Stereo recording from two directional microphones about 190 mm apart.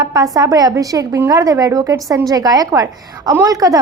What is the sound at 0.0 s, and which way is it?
A woman's voice, 20° right (ahead or behind).